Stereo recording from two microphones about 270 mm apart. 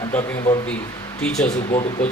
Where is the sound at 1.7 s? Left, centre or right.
Left.